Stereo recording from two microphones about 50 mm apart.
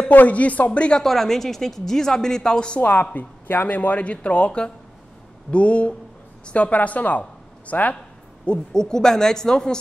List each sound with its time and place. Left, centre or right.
0.1 s speech: left
1.0 s a woman's voice: centre
2.8 s speech: left
8.5 s a woman's voice: centre